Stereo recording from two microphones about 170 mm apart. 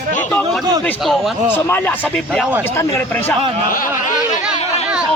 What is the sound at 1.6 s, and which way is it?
Speech, 10° left (ahead or behind).